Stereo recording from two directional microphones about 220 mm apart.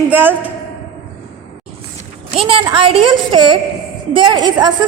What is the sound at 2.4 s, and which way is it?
A woman's voice, 25° right (ahead or behind).